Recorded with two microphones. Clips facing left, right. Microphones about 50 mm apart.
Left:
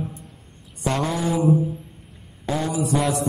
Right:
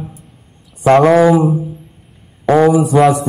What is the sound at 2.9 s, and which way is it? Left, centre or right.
Mantra, right.